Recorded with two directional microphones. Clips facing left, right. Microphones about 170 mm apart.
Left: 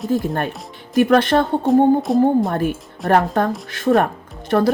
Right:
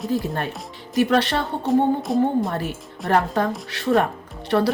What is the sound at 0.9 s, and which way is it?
Speech, 50° left (ahead or behind).